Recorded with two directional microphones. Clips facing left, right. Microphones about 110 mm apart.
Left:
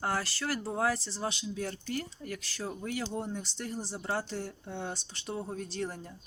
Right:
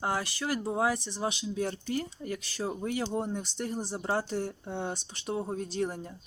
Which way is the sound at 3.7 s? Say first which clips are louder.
Right 2 dB; 50° right (ahead or behind).